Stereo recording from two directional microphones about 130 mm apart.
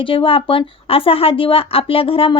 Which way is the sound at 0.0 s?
40° left (ahead or behind).